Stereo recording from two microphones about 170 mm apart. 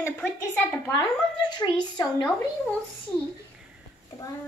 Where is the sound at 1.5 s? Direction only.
25° left (ahead or behind).